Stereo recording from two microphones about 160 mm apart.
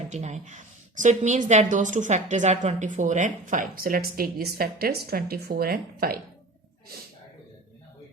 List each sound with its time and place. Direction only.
0.1 s a woman's voice: 45° right (ahead or behind); by 6.1 s 70° right (ahead or behind)